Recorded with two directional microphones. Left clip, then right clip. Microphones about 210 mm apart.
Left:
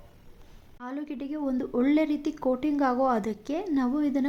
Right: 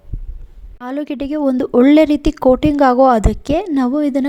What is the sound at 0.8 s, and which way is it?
Speech, 45° right (ahead or behind).